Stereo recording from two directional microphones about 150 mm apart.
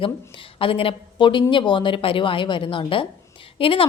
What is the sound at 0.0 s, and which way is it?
Speech, 35° left (ahead or behind).